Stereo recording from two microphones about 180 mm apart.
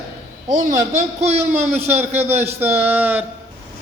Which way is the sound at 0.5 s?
40° right (ahead or behind).